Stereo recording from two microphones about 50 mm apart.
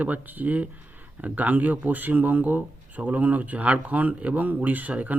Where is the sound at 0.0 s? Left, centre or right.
Right.